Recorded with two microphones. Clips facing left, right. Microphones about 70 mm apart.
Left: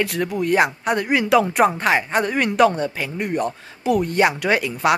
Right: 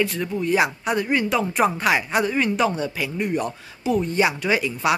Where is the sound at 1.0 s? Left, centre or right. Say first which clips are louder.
Left 8 dB; left.